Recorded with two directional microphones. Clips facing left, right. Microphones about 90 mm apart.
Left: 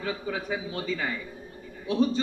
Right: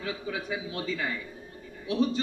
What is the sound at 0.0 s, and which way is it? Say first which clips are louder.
Speech: left 2 dB; 40° left (ahead or behind).